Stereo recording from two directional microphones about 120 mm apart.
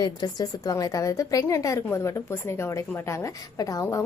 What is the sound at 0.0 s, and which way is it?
A woman's voice, 35° left (ahead or behind).